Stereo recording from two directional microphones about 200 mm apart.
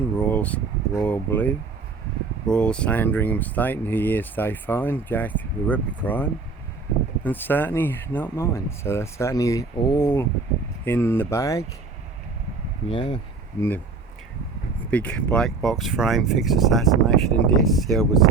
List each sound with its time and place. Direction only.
0.2 s speech: 5° left (ahead or behind)
7.3 s speech: 10° left (ahead or behind)
12.9 s speech: 25° left (ahead or behind)
13.6 s speech: 10° left (ahead or behind)
14.8 s speech: 5° left (ahead or behind)